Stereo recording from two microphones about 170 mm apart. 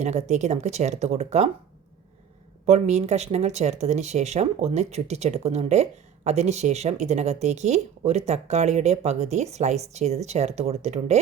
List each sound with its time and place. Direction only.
0.0 s speech: 45° right (ahead or behind)
2.6 s speech: 40° right (ahead or behind)